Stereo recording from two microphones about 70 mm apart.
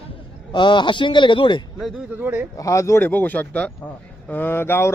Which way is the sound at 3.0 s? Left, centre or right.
Left.